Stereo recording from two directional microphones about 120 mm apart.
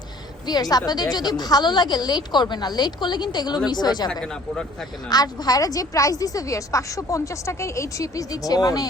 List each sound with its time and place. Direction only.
0.4 s a woman's voice: 35° left (ahead or behind)
4.1 s speech: 5° left (ahead or behind)
5.0 s a woman's voice: 35° left (ahead or behind)